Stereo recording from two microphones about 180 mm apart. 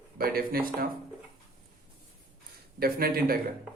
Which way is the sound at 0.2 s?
55° right (ahead or behind).